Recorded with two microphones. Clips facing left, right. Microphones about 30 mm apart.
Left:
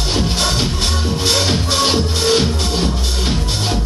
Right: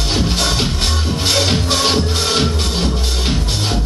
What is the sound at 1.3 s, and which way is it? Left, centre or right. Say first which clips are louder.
Music: right 2 dB; centre.